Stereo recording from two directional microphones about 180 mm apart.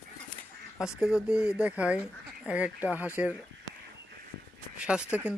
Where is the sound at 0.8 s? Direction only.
5° right (ahead or behind).